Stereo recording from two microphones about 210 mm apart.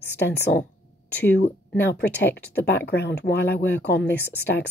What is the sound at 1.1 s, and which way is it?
Speech, 10° left (ahead or behind).